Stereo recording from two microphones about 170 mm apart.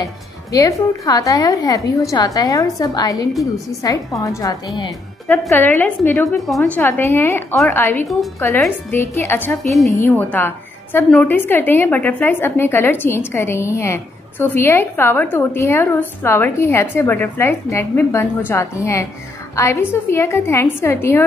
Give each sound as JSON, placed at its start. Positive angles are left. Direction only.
{"t": 0.0, "sound": "speech", "side_deg": 20}
{"t": 5.5, "sound": "a woman's voice", "side_deg": 10}
{"t": 9.5, "sound": "a woman's voice", "side_deg": 0}
{"t": 10.0, "sound": "a woman's voice", "side_deg": 10}